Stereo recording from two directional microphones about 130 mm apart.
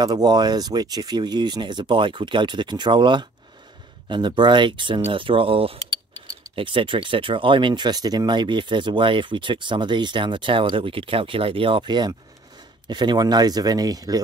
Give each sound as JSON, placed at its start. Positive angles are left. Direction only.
{"t": 0.0, "sound": "speech", "side_deg": -30}